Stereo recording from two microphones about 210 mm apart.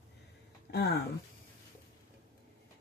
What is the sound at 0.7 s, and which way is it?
Speech, 50° left (ahead or behind).